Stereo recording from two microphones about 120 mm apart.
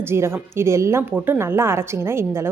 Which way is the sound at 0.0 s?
20° right (ahead or behind).